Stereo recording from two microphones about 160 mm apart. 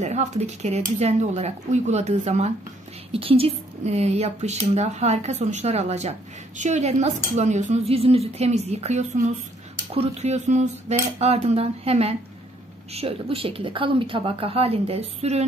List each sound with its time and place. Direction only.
0.0 s speech: 45° right (ahead or behind)